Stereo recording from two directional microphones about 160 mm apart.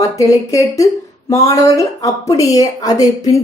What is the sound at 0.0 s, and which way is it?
A woman's voice, 20° left (ahead or behind).